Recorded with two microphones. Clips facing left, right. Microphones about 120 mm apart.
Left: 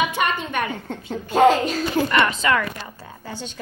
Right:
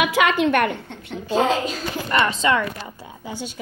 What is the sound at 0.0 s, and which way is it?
Speech, 90° right.